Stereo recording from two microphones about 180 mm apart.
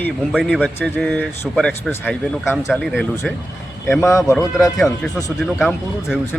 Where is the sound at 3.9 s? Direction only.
15° left (ahead or behind).